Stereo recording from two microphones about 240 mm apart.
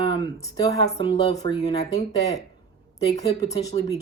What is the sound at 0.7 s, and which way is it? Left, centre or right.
Speech, centre.